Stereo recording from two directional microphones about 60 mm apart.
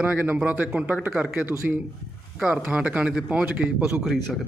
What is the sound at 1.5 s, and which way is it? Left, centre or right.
Speech, right.